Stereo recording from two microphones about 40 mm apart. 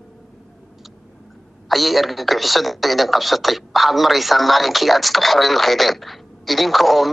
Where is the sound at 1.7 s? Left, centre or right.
Centre.